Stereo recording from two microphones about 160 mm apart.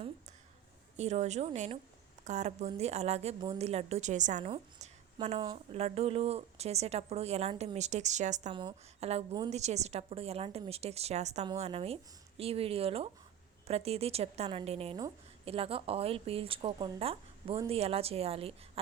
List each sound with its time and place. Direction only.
0.9 s a woman's voice: 45° right (ahead or behind)
4.4 s a woman's voice: 35° right (ahead or behind)